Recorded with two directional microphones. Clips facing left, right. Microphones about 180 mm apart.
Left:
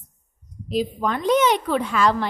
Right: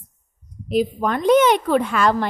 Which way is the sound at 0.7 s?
55° right (ahead or behind).